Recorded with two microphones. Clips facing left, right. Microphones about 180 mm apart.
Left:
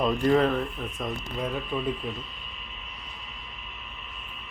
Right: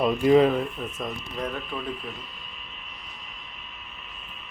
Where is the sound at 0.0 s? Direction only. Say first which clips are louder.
Right 4 dB; 10° right (ahead or behind).